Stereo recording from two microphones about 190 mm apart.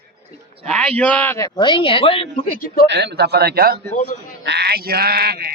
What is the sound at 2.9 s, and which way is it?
A man's voice, 60° right (ahead or behind).